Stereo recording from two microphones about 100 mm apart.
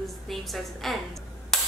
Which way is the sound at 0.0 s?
Centre (ahead or behind).